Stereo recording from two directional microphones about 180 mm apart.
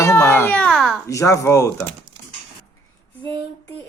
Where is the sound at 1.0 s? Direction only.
15° left (ahead or behind).